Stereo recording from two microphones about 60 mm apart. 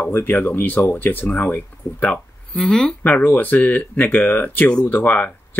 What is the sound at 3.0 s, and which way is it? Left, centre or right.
Speech, left.